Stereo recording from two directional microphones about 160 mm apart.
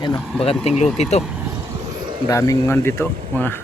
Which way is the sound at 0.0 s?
30° left (ahead or behind).